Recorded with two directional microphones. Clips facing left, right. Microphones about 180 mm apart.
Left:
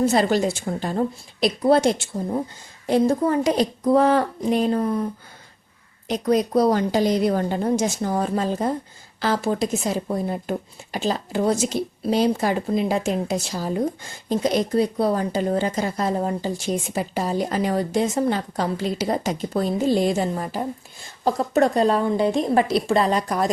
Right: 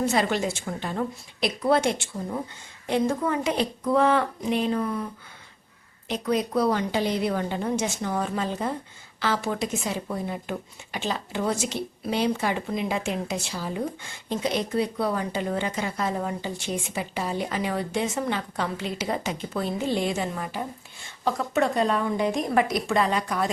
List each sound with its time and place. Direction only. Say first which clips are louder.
0.0 s speech: left 5 dB; 35° left (ahead or behind)
6.1 s speech: left 5 dB; 40° left (ahead or behind)